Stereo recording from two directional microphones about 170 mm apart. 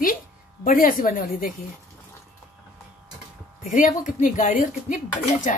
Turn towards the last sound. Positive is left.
turn(degrees=45)  # may be behind; listen again after turning